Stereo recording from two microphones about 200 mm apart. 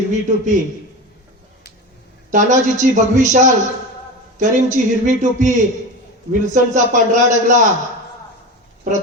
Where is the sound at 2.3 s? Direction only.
40° right (ahead or behind).